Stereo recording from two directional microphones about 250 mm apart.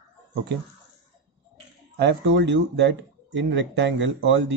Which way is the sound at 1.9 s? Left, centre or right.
Right.